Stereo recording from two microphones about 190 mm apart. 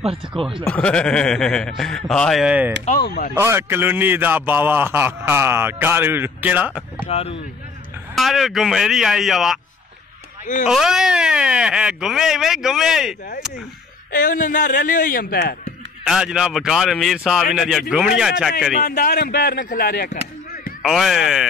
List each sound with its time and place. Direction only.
0.0 s speech: 30° right (ahead or behind)
0.7 s speech: 5° left (ahead or behind)
3.0 s a man's voice: 50° left (ahead or behind)
3.3 s a man's voice: 10° right (ahead or behind)
7.1 s speech: 30° left (ahead or behind)
8.1 s speech: centre (ahead or behind)
10.4 s speech: 40° left (ahead or behind)
10.7 s speech: centre (ahead or behind)
14.1 s a man's voice: 45° left (ahead or behind)
16.0 s speech: 5° right (ahead or behind)
18.8 s a man's voice: 50° left (ahead or behind)
20.8 s speech: centre (ahead or behind)